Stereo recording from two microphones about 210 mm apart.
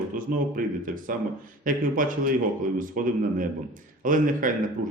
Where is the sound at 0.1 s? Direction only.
40° right (ahead or behind).